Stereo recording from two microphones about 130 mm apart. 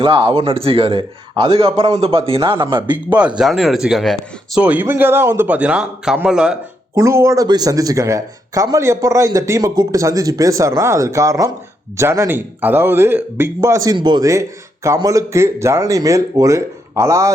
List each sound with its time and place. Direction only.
0.0 s a man's voice: 40° right (ahead or behind)
3.1 s speech: 10° right (ahead or behind)
4.6 s a man's voice: 15° right (ahead or behind)
6.9 s speech: 20° right (ahead or behind)